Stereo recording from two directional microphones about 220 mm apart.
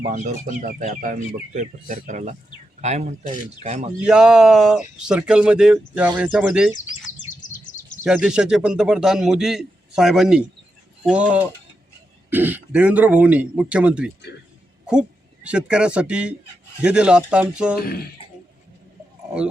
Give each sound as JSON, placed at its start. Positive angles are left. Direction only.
{"t": 0.0, "sound": "speech", "side_deg": -35}
{"t": 4.0, "sound": "a man's voice", "side_deg": -5}
{"t": 7.3, "sound": "bird", "side_deg": 35}
{"t": 8.0, "sound": "a man's voice", "side_deg": -5}
{"t": 17.7, "sound": "speech", "side_deg": 40}